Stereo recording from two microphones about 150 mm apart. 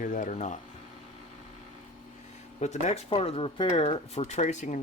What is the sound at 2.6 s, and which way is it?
Speech, 50° left (ahead or behind).